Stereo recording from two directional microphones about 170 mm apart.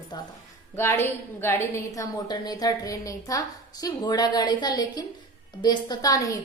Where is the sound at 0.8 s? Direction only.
15° left (ahead or behind).